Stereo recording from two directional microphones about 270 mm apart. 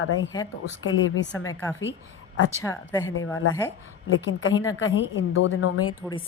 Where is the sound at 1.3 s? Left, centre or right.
Centre.